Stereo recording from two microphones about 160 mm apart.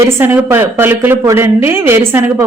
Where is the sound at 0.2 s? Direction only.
15° right (ahead or behind).